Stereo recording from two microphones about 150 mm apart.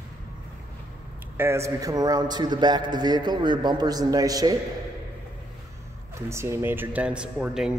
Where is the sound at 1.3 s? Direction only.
15° right (ahead or behind).